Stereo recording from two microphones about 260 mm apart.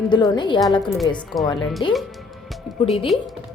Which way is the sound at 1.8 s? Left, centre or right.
Centre.